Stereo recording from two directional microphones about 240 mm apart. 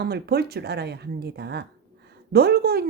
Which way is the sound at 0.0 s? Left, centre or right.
Right.